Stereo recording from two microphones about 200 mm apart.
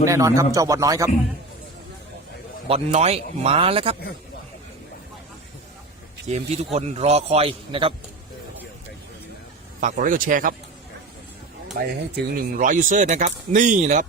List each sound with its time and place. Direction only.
0.0 s speech: 15° right (ahead or behind)
2.6 s speech: 30° right (ahead or behind)
6.2 s speech: 35° right (ahead or behind)
9.8 s a man's voice: 40° right (ahead or behind)
11.8 s speech: 55° right (ahead or behind); by 14.1 s 35° right (ahead or behind)